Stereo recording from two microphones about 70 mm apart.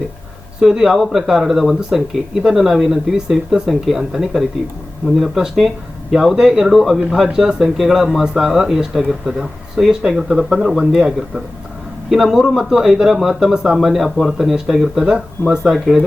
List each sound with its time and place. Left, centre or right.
0.6 s speech: centre